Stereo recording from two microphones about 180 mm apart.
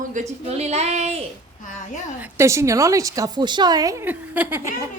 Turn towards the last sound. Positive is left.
turn(degrees=-15)  # may be behind; listen again after turning